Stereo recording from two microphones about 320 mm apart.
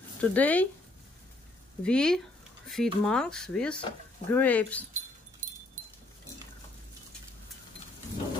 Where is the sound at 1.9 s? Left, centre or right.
Centre.